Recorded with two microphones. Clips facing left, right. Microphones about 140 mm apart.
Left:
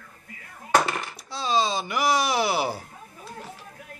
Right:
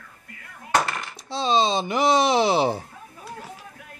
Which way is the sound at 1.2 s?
25° right (ahead or behind).